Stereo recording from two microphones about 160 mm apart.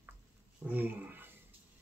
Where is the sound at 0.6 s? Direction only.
10° right (ahead or behind).